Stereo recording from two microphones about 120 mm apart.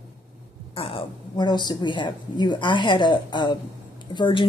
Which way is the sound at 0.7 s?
50° left (ahead or behind).